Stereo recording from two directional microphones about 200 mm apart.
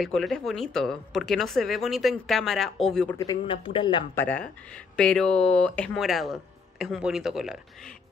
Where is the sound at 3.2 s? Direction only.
20° left (ahead or behind).